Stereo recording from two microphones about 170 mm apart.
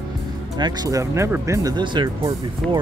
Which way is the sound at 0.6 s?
25° right (ahead or behind).